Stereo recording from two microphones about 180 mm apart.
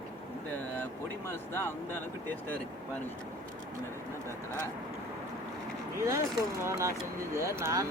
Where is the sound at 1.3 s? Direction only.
15° left (ahead or behind).